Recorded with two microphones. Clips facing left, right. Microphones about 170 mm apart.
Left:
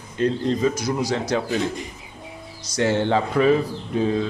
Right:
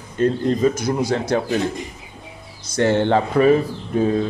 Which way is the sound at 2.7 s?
55° right (ahead or behind).